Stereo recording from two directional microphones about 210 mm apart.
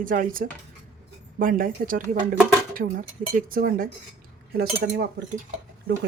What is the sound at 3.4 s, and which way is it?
Speech, 40° right (ahead or behind).